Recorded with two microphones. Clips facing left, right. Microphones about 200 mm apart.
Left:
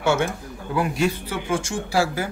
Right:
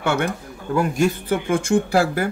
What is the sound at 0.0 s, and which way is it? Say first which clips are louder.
Speech: even; 60° right (ahead or behind).